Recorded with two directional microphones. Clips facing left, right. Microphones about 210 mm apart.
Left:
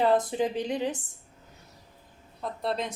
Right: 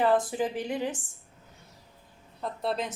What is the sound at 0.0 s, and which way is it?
A woman's voice, 20° left (ahead or behind).